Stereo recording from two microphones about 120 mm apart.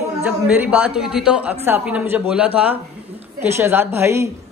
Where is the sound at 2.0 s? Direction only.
10° right (ahead or behind).